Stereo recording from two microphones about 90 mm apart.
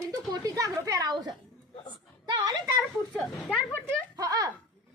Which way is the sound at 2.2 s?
45° right (ahead or behind).